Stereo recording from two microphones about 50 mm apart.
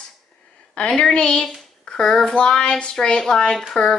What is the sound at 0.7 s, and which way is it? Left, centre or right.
A woman's voice, centre.